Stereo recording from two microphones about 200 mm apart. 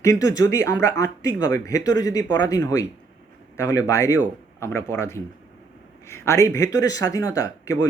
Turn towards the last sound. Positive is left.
turn(degrees=15)  # may be behind; listen again after turning